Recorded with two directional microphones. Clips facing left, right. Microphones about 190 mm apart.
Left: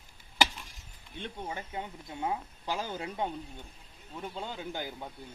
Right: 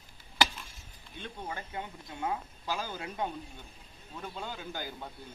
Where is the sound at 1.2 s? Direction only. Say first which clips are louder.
Left 2 dB; 20° left (ahead or behind).